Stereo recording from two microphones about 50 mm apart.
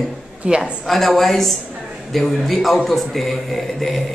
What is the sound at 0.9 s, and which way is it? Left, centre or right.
A man's voice, centre.